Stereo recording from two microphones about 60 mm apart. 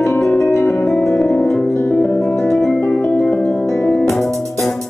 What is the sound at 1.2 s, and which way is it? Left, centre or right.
Music, left.